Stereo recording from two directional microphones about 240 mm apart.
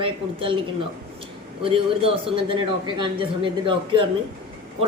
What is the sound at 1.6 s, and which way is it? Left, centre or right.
A man's voice, right.